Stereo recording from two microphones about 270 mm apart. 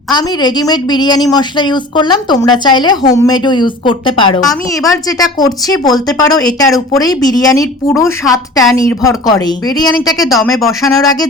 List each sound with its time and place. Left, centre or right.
0.1 s a woman's voice: centre
10.2 s speech: centre
10.7 s a woman's voice: centre